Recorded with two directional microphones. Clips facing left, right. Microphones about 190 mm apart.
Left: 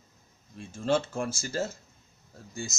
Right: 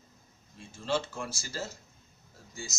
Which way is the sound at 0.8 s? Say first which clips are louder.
Left 5 dB; 50° left (ahead or behind).